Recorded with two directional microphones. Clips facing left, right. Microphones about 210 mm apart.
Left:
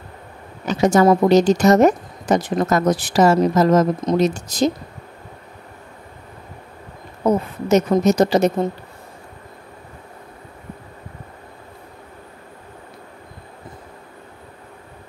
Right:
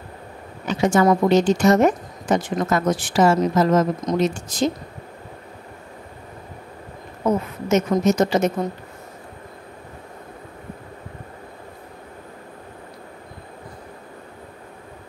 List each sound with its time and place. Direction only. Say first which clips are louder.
0.7 s a woman's voice: left 3 dB; 40° left (ahead or behind)
7.2 s a woman's voice: left 3 dB; 35° left (ahead or behind)